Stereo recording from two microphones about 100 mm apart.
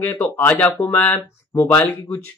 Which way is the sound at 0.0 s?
20° left (ahead or behind).